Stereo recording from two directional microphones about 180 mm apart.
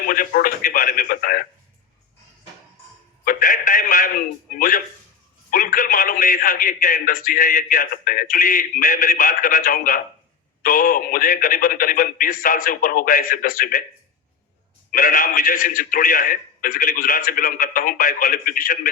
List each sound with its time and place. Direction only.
0.1 s radio: 50° left (ahead or behind)
3.2 s telephone: 50° left (ahead or behind)
5.5 s a man's voice: 50° left (ahead or behind)
14.9 s a man's voice: 50° left (ahead or behind)